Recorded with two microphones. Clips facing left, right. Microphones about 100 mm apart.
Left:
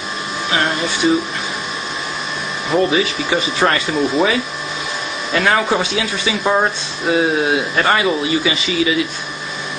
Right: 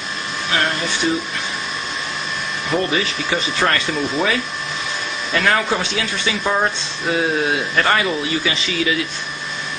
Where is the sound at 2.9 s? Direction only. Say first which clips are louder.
Left 4 dB; 10° left (ahead or behind).